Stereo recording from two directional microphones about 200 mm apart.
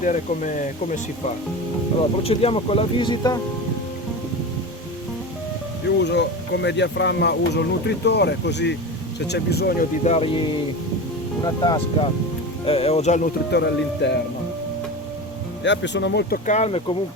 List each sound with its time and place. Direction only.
0.0 s speech: 40° left (ahead or behind)
2.2 s speech: 30° left (ahead or behind)
6.0 s speech: 60° left (ahead or behind)
10.0 s speech: 30° left (ahead or behind)
13.5 s speech: 55° left (ahead or behind)
15.6 s speech: 60° left (ahead or behind)
16.5 s speech: 35° left (ahead or behind)